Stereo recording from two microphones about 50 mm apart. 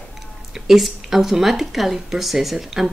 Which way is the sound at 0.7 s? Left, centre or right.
Centre.